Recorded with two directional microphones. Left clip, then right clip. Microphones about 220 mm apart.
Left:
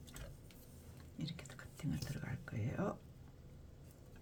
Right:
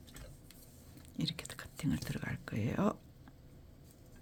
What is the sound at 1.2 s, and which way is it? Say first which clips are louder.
Whispering: right 9 dB; 50° right (ahead or behind).